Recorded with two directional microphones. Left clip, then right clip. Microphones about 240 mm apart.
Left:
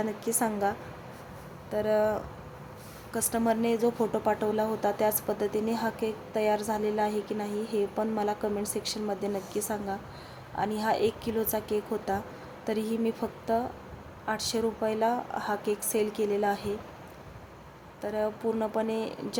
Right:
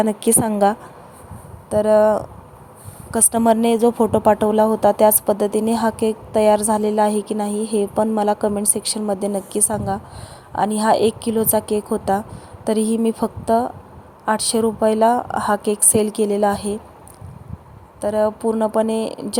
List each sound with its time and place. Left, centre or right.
0.0 s a woman's voice: right
18.0 s a woman's voice: right